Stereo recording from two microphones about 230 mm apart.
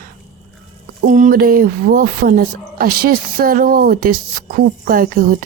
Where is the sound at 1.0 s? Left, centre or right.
Right.